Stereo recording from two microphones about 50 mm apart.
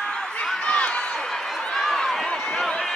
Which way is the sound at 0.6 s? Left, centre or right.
Left.